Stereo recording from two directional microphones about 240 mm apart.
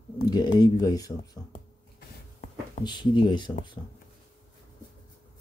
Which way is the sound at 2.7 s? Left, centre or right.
Centre.